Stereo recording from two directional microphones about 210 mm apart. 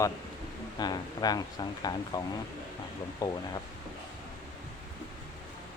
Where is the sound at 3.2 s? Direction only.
20° left (ahead or behind).